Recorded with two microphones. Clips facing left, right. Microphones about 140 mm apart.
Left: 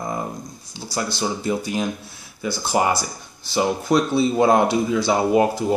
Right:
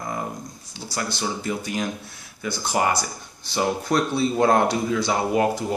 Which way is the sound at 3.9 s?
20° left (ahead or behind).